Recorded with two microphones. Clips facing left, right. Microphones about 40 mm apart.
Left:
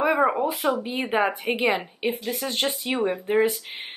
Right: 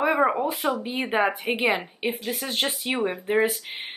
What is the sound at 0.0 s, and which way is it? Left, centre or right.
A woman's voice, centre.